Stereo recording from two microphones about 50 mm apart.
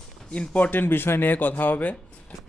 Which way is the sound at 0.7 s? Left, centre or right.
Left.